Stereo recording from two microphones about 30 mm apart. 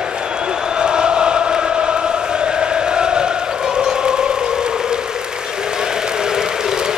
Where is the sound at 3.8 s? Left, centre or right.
Right.